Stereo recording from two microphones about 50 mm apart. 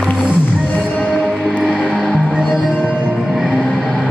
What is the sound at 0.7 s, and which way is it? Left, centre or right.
Music, left.